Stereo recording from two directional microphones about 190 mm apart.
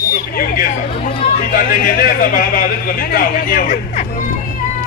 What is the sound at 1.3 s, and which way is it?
Speech, 50° left (ahead or behind).